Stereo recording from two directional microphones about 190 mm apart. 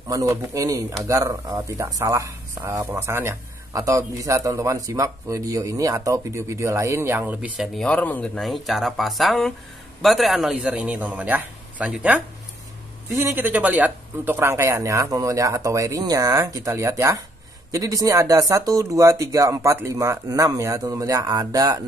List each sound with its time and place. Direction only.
0.1 s speech: 15° right (ahead or behind)